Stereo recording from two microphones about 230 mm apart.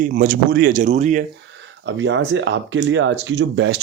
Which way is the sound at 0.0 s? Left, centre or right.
Right.